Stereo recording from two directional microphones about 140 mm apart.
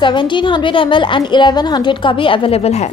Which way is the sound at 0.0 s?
35° left (ahead or behind).